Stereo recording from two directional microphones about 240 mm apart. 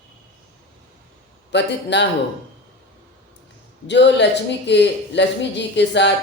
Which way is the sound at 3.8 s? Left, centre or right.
Left.